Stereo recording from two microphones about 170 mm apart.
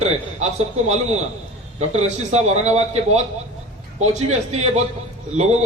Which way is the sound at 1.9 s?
40° right (ahead or behind).